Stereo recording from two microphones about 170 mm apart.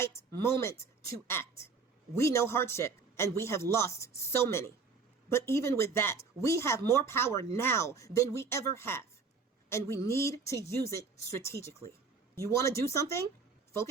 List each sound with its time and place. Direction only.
0.0 s a woman's voice: 15° left (ahead or behind)